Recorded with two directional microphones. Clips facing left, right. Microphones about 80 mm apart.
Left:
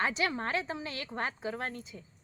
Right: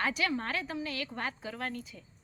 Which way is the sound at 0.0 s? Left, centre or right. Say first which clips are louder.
Even; left.